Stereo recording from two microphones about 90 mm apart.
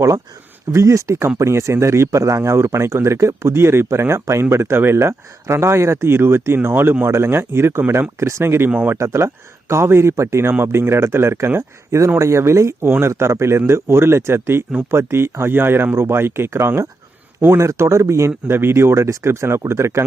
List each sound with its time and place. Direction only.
0.7 s speech: 35° right (ahead or behind)
8.7 s speech: 15° right (ahead or behind)
9.0 s speech: 30° right (ahead or behind)